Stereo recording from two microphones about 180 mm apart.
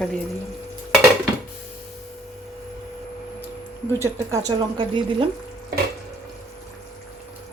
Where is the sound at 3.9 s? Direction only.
15° right (ahead or behind).